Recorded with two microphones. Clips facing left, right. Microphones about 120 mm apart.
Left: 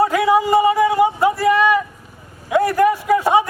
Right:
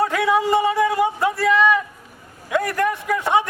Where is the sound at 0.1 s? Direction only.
Centre (ahead or behind).